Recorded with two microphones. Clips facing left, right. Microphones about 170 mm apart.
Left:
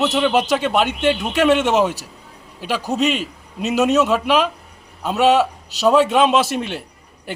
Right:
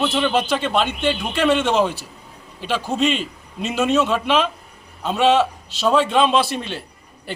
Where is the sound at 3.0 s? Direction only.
5° left (ahead or behind).